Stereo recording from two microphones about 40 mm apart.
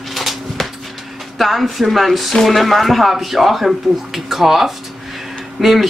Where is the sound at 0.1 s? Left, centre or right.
Centre.